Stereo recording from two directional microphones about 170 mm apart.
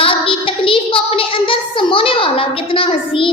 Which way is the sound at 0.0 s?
30° left (ahead or behind).